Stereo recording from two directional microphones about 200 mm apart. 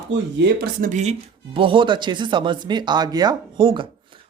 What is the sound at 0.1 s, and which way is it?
Speech, 60° right (ahead or behind).